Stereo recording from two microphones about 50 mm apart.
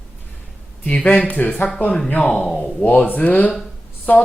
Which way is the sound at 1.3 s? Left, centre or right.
Left.